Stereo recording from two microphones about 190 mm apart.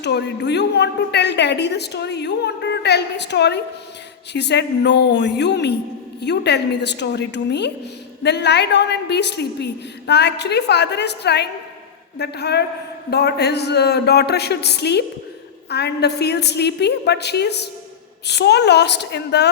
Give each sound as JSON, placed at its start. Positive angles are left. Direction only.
{"t": 0.0, "sound": "a woman's voice", "side_deg": 65}